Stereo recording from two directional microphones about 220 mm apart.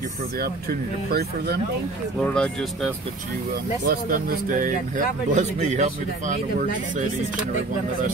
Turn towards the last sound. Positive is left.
turn(degrees=-35)  # may be behind; listen again after turning